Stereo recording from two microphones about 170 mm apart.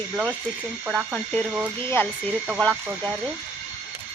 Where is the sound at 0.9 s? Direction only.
Centre (ahead or behind).